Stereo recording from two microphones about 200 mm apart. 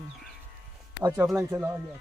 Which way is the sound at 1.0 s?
10° right (ahead or behind).